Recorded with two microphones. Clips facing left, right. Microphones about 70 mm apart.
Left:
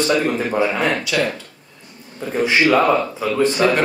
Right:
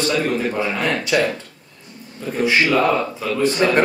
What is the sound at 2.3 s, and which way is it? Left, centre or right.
A man's voice, centre.